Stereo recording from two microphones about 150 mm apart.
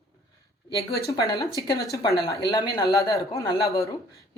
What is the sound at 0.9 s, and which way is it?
Speech, 25° left (ahead or behind).